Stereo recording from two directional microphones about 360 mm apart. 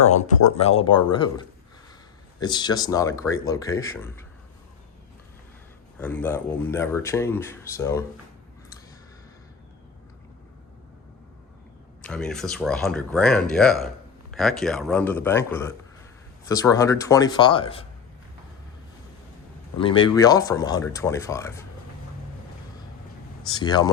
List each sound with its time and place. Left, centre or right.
0.0 s speech: centre
6.0 s speech: centre
12.0 s speech: centre
19.8 s speech: centre
23.5 s speech: centre